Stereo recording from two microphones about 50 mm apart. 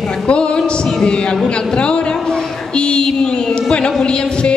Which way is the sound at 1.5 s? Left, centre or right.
Left.